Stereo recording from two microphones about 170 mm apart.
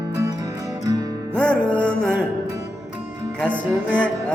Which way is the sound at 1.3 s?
5° left (ahead or behind).